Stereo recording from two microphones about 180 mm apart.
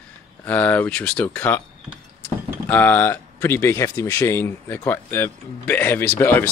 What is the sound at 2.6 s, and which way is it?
Speech, 10° left (ahead or behind).